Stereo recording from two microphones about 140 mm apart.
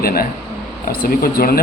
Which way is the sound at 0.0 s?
90° left.